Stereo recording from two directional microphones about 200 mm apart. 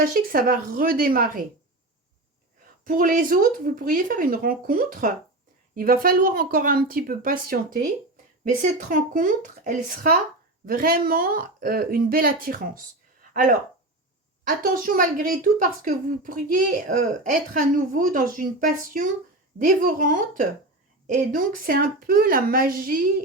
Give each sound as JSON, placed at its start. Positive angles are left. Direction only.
{"t": 0.0, "sound": "speech", "side_deg": -45}
{"t": 2.8, "sound": "speech", "side_deg": -45}